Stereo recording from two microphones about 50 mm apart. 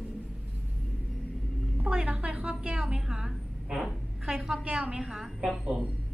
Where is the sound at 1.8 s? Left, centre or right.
Right.